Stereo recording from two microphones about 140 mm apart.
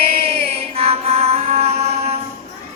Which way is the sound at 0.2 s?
45° right (ahead or behind).